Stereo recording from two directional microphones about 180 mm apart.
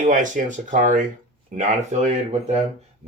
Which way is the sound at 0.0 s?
45° right (ahead or behind).